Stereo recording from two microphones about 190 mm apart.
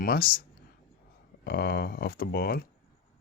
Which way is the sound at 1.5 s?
55° left (ahead or behind).